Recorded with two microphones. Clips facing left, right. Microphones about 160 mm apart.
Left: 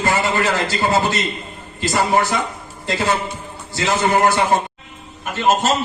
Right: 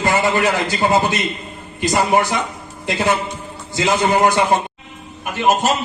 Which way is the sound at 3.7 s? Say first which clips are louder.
Right 2 dB; 15° right (ahead or behind).